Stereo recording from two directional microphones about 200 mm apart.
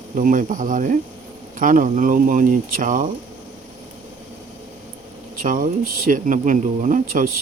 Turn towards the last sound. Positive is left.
turn(degrees=-45)  # may be behind; listen again after turning